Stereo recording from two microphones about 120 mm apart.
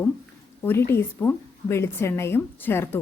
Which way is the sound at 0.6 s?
20° left (ahead or behind).